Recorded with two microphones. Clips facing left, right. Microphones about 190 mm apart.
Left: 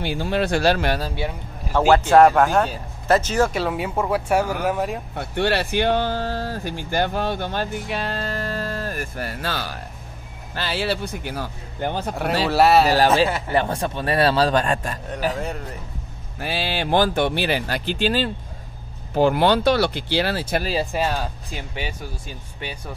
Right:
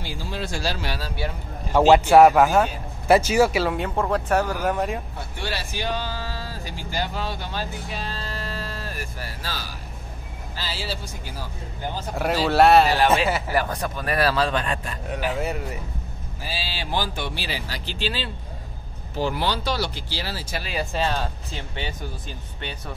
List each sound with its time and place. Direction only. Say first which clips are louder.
0.0 s speech: left 9 dB; 65° left (ahead or behind)
1.9 s a man's voice: even; 10° right (ahead or behind)
5.1 s speech: left 9 dB; 65° left (ahead or behind)
12.4 s a man's voice: even; centre (ahead or behind)
13.5 s speech: left 3 dB; 25° left (ahead or behind); by 15.0 s 45° left (ahead or behind)
15.3 s a man's voice: right 1 dB; 5° right (ahead or behind)
16.3 s speech: left 8 dB; 60° left (ahead or behind)
20.9 s speech: left 2 dB; 10° left (ahead or behind)